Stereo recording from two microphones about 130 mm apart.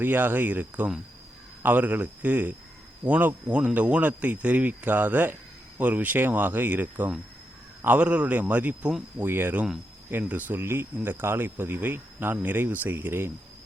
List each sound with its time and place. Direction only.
0.0 s speech: 15° right (ahead or behind)
9.2 s speech: 15° right (ahead or behind)